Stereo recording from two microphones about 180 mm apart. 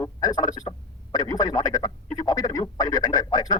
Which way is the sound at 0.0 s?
20° left (ahead or behind).